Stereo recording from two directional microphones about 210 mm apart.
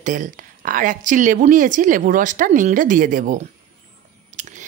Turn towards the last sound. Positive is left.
turn(degrees=-35)  # may be behind; listen again after turning